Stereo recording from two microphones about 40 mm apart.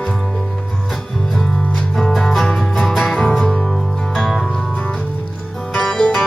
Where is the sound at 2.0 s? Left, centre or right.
Centre.